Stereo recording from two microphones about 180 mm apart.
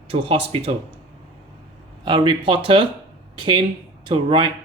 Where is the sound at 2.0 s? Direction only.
25° right (ahead or behind).